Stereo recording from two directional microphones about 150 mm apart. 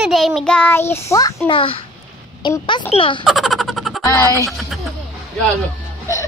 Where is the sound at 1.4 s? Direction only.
40° left (ahead or behind).